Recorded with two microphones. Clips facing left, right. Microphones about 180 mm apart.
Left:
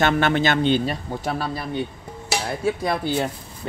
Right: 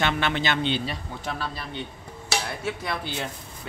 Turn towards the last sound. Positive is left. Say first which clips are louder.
# left 8 dB
turn(degrees=40)  # may be behind; listen again after turning